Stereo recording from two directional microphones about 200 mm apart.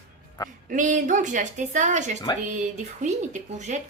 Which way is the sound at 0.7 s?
40° right (ahead or behind).